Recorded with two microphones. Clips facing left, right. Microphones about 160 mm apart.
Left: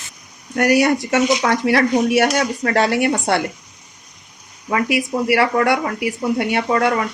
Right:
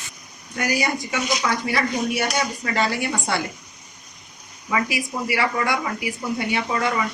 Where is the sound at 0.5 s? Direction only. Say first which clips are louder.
Left 9 dB; 70° left (ahead or behind).